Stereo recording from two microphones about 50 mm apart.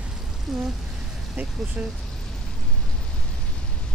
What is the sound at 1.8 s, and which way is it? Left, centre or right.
Speech, right.